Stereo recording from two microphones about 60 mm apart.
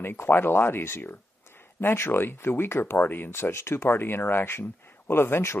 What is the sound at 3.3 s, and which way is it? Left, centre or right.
Speech, left.